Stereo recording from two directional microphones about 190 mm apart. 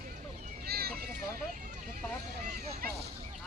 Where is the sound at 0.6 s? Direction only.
55° right (ahead or behind).